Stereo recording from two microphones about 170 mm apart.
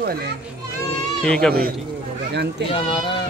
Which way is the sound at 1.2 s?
5° left (ahead or behind).